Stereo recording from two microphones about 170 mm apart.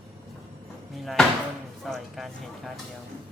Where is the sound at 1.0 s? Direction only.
Centre (ahead or behind).